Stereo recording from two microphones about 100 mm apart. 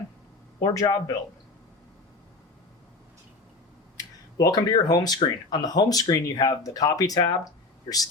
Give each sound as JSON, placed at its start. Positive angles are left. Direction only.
{"t": 0.7, "sound": "speech", "side_deg": 35}
{"t": 3.9, "sound": "speech", "side_deg": 40}